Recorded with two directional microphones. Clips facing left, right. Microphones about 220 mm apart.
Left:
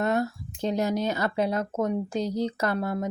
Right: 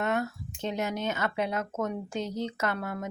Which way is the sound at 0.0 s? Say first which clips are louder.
Left 4 dB; 35° left (ahead or behind).